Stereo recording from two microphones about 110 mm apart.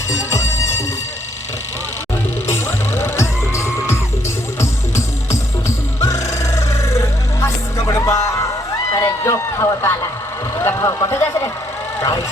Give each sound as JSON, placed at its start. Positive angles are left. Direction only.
{"t": 0.1, "sound": "music", "side_deg": 25}
{"t": 2.5, "sound": "music", "side_deg": 25}
{"t": 6.0, "sound": "music", "side_deg": 30}
{"t": 9.0, "sound": "a sound", "side_deg": 25}
{"t": 11.9, "sound": "music", "side_deg": 30}